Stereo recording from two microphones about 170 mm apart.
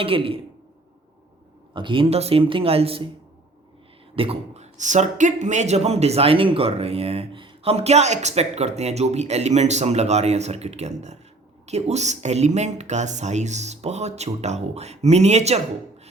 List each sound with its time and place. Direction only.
0.0 s speech: 30° right (ahead or behind)
1.7 s speech: 30° right (ahead or behind)
4.1 s speech: 35° right (ahead or behind)